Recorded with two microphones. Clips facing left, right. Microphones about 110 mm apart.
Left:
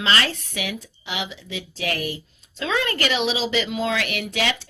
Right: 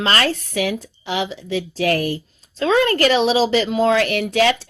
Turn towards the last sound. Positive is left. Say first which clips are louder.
# right 8 dB
turn(degrees=-45)  # may be behind; listen again after turning